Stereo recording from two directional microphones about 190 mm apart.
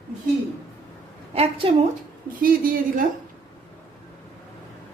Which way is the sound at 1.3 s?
30° right (ahead or behind).